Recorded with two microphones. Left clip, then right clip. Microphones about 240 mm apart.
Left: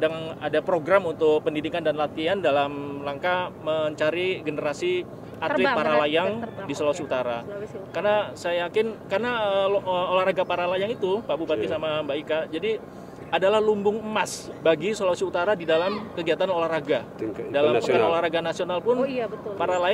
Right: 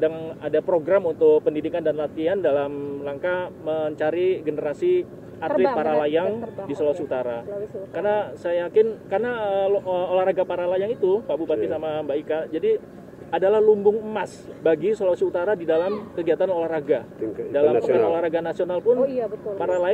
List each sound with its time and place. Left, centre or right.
0.0 s speech: left
17.6 s a man's voice: left
18.1 s speech: left